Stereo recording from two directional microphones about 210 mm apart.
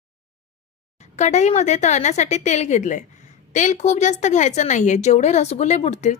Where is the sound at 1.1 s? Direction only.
35° left (ahead or behind).